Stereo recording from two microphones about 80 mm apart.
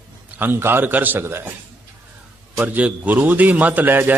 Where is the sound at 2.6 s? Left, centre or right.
Centre.